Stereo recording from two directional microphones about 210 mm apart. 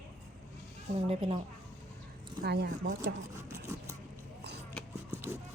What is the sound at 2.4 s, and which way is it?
Speech, 50° right (ahead or behind).